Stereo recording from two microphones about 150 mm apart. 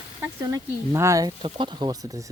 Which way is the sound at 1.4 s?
30° right (ahead or behind).